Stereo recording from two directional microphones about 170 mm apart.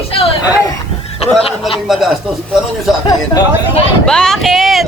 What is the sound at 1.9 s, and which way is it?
Speech, centre (ahead or behind).